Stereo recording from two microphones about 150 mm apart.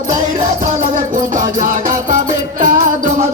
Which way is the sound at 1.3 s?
60° right (ahead or behind).